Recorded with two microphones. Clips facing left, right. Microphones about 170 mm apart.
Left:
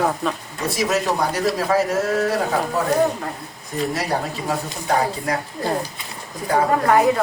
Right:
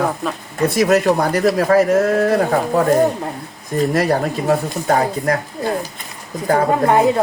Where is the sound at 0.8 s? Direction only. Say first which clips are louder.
Right 6 dB; 55° right (ahead or behind).